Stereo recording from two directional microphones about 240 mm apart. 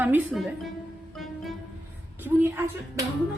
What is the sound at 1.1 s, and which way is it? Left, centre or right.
Music, centre.